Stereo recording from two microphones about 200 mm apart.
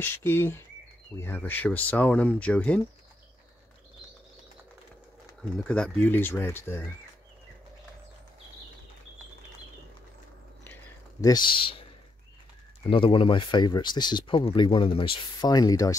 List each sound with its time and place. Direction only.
0.0 s speech: 10° left (ahead or behind)
5.4 s speech: 5° left (ahead or behind)
10.6 s a sound: 15° left (ahead or behind)
12.9 s speech: 25° left (ahead or behind)